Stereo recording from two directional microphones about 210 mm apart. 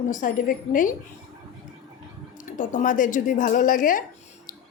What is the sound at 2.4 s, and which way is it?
Speech, 35° left (ahead or behind).